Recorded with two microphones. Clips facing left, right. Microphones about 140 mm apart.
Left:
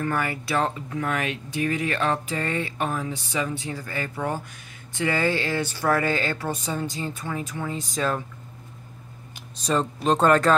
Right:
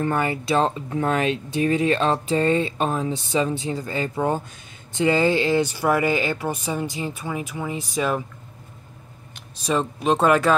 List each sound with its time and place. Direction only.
0.0 s speech: 25° right (ahead or behind)
9.6 s speech: 5° right (ahead or behind)